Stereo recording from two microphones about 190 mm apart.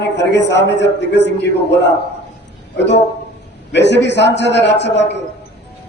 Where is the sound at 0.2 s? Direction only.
65° left (ahead or behind).